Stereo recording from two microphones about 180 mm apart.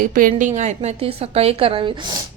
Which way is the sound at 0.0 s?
50° right (ahead or behind).